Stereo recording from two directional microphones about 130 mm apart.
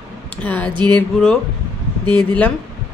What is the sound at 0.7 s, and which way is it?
Speech, 35° right (ahead or behind).